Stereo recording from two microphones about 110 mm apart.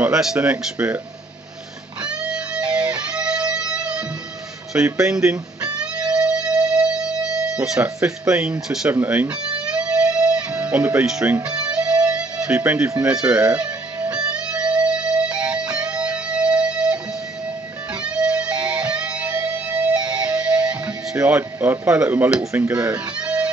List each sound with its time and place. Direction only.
0.0 s speech: 5° right (ahead or behind)
2.0 s music: 10° right (ahead or behind)
4.7 s speech: 15° right (ahead or behind)
5.2 s music: 10° right (ahead or behind)
8.9 s speech: 15° right (ahead or behind)
9.8 s music: 10° right (ahead or behind)
13.0 s speech: 10° right (ahead or behind)
14.0 s music: 10° right (ahead or behind)
18.0 s music: 10° right (ahead or behind)
22.4 s speech: 25° right (ahead or behind)
22.8 s music: 10° right (ahead or behind)